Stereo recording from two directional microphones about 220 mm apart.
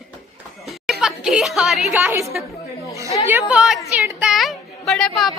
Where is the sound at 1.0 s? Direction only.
5° right (ahead or behind).